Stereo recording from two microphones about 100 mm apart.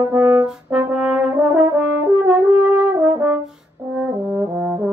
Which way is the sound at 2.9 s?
25° right (ahead or behind).